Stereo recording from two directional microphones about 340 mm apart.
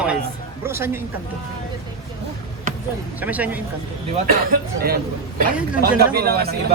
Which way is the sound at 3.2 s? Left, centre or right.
Centre.